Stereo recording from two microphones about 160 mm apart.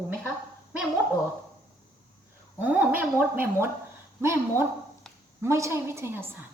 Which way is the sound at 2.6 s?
10° right (ahead or behind).